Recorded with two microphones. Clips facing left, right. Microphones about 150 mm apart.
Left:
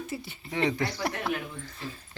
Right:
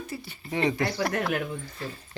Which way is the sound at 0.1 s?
25° left (ahead or behind).